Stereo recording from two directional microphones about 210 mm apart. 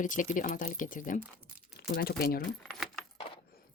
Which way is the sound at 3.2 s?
25° left (ahead or behind).